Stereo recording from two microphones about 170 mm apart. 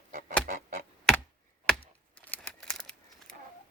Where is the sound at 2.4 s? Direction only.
5° left (ahead or behind).